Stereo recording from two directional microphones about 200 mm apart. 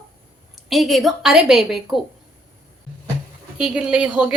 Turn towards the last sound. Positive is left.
turn(degrees=-5)  # may be behind; listen again after turning